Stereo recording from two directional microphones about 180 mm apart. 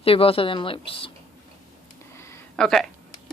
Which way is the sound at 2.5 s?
Centre (ahead or behind).